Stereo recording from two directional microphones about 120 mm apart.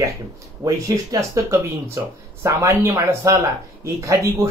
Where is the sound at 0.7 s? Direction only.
30° right (ahead or behind).